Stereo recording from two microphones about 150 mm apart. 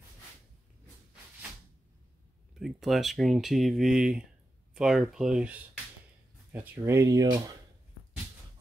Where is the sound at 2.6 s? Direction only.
Centre (ahead or behind); by 7.5 s 25° right (ahead or behind).